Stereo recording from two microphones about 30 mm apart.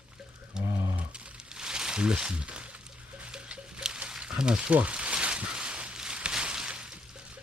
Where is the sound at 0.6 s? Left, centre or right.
Right.